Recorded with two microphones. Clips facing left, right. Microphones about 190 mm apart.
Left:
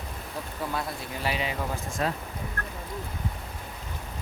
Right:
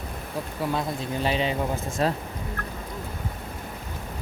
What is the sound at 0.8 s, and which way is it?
Speech, 25° right (ahead or behind).